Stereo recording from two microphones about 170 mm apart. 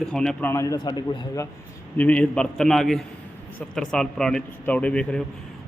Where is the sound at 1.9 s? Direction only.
10° left (ahead or behind).